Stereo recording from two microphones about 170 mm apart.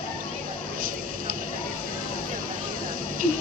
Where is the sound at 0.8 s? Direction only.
55° right (ahead or behind).